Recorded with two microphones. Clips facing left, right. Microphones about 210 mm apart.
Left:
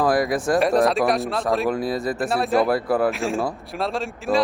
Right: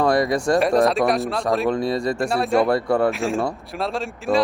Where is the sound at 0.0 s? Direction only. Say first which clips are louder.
Right 1 dB; centre (ahead or behind).